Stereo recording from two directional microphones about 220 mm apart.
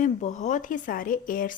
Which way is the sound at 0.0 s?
35° left (ahead or behind).